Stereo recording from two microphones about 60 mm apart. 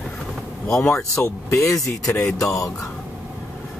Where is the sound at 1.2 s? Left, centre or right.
Left.